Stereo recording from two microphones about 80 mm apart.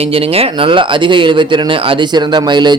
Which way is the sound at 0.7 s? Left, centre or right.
Right.